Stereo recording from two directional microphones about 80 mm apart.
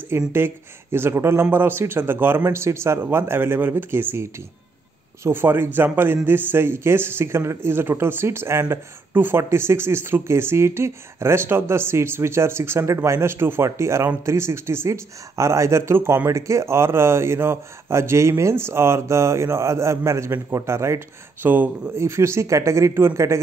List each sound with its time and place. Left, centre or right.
0.1 s a man's voice: right
21.5 s a man's voice: right
21.9 s speech: right